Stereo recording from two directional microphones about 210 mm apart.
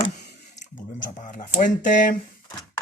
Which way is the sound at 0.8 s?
40° left (ahead or behind).